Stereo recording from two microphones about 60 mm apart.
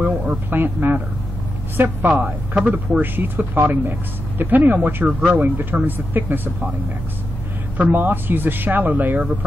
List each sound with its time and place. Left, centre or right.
0.0 s a sound: right
0.5 s speech: right
7.7 s speech: right